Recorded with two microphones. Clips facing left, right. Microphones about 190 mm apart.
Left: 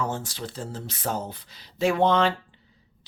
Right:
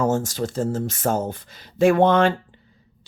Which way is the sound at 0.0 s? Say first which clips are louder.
Right 9 dB; 45° right (ahead or behind).